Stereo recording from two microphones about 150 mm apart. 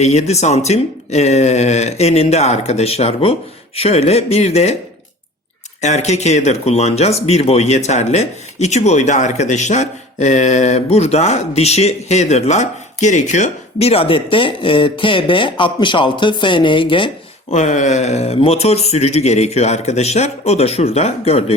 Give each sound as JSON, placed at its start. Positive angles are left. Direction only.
{"t": 0.0, "sound": "speech", "side_deg": 50}
{"t": 5.8, "sound": "speech", "side_deg": 50}
{"t": 17.5, "sound": "speech", "side_deg": 55}